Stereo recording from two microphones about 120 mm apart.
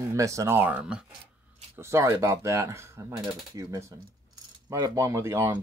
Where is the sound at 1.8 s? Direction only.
25° right (ahead or behind).